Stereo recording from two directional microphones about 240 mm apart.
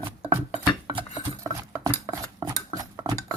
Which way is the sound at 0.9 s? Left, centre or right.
Centre.